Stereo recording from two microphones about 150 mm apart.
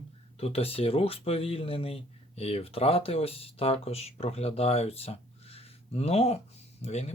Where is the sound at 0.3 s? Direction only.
40° left (ahead or behind).